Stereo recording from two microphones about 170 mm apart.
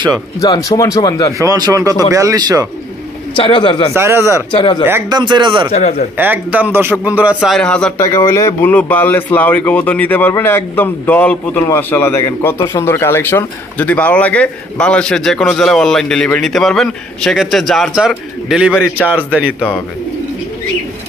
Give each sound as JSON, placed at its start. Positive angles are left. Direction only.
{"t": 0.4, "sound": "speech", "side_deg": 20}
{"t": 1.4, "sound": "speech", "side_deg": -20}
{"t": 3.3, "sound": "speech", "side_deg": 30}
{"t": 3.9, "sound": "a man's voice", "side_deg": -15}
{"t": 4.5, "sound": "speech", "side_deg": 30}
{"t": 4.8, "sound": "a man's voice", "side_deg": -15}
{"t": 5.2, "sound": "speech", "side_deg": -30}
{"t": 5.7, "sound": "a man's voice", "side_deg": 40}
{"t": 6.1, "sound": "a man's voice", "side_deg": -10}
{"t": 7.3, "sound": "a man's voice", "side_deg": 5}
{"t": 8.0, "sound": "a man's voice", "side_deg": 20}